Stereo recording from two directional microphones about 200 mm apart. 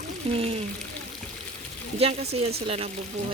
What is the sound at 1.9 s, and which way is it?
Speech, 30° right (ahead or behind).